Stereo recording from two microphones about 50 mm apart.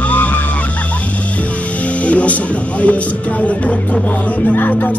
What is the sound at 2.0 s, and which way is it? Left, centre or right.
Music, left.